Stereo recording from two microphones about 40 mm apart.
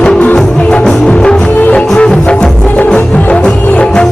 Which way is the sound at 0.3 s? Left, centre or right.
Left.